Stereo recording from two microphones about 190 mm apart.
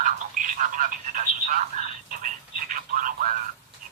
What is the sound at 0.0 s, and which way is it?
Speech, 40° right (ahead or behind).